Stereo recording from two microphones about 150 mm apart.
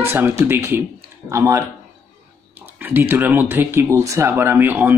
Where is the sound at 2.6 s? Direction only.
10° right (ahead or behind).